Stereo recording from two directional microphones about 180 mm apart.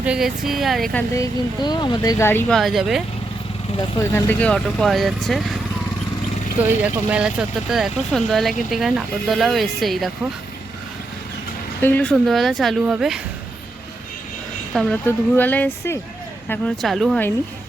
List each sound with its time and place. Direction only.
0.0 s speech: 5° right (ahead or behind)
1.1 s speech: 20° left (ahead or behind)
2.5 s speech: centre (ahead or behind)
3.8 s speech: 15° left (ahead or behind); by 5.4 s centre (ahead or behind)
6.8 s speech: 5° right (ahead or behind)
11.8 s speech: 10° left (ahead or behind)
14.7 s speech: centre (ahead or behind)